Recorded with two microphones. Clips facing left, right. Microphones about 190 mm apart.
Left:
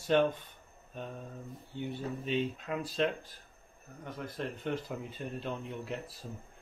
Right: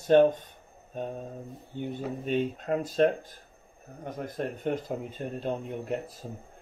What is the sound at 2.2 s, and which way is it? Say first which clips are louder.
Speech: right 5 dB; 45° right (ahead or behind).